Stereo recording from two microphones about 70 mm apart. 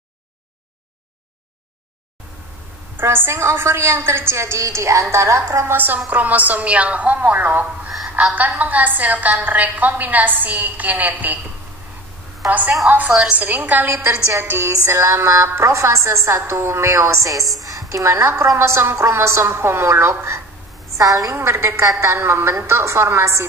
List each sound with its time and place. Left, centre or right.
3.0 s a woman's voice: right
6.0 s a woman's voice: right
12.4 s a woman's voice: right
18.0 s a woman's voice: right
21.0 s a woman's voice: right
21.4 s a woman's voice: right